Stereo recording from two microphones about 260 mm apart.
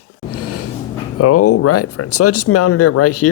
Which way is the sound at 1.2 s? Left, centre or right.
Left.